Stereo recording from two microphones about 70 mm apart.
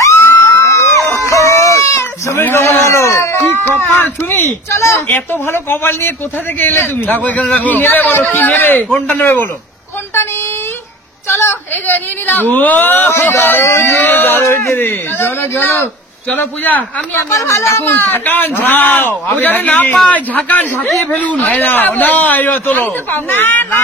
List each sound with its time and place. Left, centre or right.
0.0 s crowd: left
0.5 s a sound: left
4.6 s speech: left
5.0 s a man's voice: left
11.2 s a woman's voice: left
16.3 s a man's voice: left
17.4 s speech: left
17.7 s a man's voice: left